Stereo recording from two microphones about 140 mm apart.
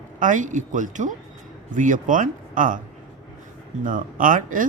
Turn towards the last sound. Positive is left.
turn(degrees=-70)  # may be behind; listen again after turning